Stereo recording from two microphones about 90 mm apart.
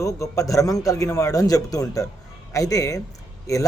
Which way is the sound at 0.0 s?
40° left (ahead or behind).